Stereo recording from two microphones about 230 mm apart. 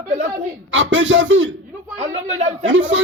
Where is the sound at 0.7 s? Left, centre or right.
Right.